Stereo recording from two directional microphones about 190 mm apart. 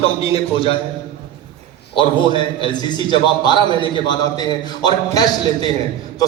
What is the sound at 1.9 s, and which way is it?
A man's voice, 25° left (ahead or behind).